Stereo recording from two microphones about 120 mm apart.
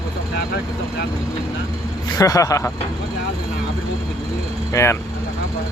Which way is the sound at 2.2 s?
30° left (ahead or behind).